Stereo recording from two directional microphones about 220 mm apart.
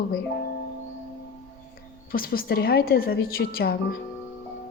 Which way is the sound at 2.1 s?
40° left (ahead or behind).